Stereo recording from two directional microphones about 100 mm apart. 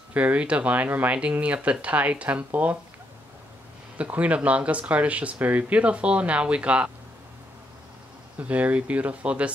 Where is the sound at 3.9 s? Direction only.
15° right (ahead or behind).